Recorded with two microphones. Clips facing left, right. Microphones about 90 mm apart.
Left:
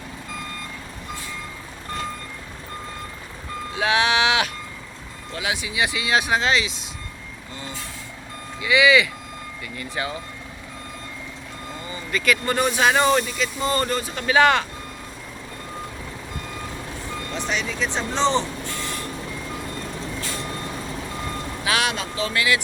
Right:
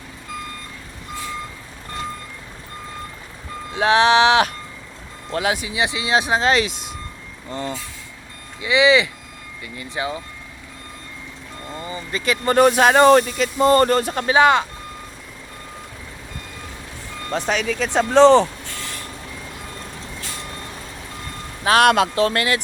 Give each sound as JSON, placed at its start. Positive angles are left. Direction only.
{"t": 3.8, "sound": "speech", "side_deg": -35}
{"t": 6.5, "sound": "speech", "side_deg": -55}
{"t": 8.6, "sound": "speech", "side_deg": -25}
{"t": 11.8, "sound": "vehicle", "side_deg": -30}
{"t": 12.5, "sound": "speech", "side_deg": -50}
{"t": 14.3, "sound": "speech", "side_deg": -20}
{"t": 17.3, "sound": "speech", "side_deg": -45}
{"t": 21.6, "sound": "speech", "side_deg": -45}